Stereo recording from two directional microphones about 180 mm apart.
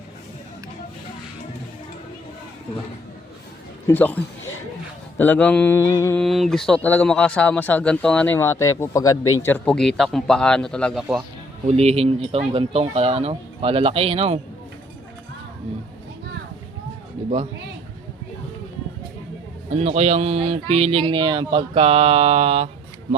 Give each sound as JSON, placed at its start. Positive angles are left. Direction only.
{"t": 3.8, "sound": "mantra", "side_deg": 10}
{"t": 6.1, "sound": "speech", "side_deg": 0}
{"t": 11.6, "sound": "speech", "side_deg": -35}
{"t": 19.7, "sound": "speech", "side_deg": -35}